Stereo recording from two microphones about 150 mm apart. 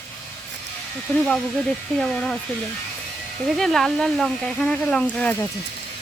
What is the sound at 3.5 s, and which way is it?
Speech, centre (ahead or behind).